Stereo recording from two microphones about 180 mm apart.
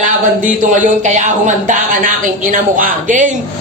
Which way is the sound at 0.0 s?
45° right (ahead or behind).